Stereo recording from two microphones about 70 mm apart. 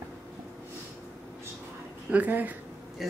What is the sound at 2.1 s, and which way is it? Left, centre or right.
Speech, right.